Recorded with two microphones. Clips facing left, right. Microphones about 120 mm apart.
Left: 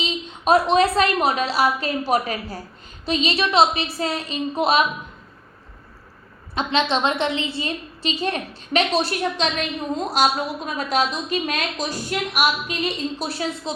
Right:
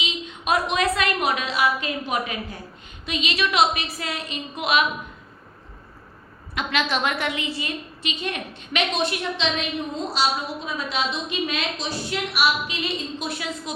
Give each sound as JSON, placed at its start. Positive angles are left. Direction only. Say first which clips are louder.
{"t": 0.0, "sound": "a woman's voice", "louder": "left 5 dB", "side_deg": 30}
{"t": 6.5, "sound": "a woman's voice", "louder": "left 4 dB", "side_deg": 30}